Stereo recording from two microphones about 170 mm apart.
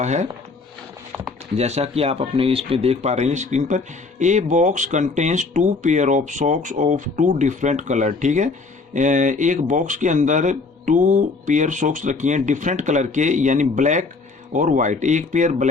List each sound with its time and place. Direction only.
0.0 s speech: 40° right (ahead or behind)
1.5 s speech: 40° right (ahead or behind)